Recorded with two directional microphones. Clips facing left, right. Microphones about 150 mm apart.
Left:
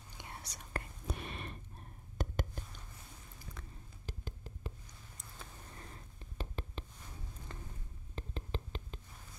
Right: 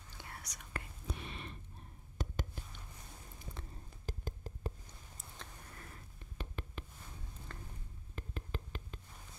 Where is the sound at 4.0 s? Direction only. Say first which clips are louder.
Right 3 dB; 40° right (ahead or behind).